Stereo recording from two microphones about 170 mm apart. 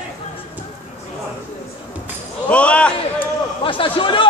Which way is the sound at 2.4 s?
5° left (ahead or behind).